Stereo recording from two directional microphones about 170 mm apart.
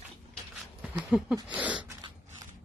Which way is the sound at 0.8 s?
5° right (ahead or behind).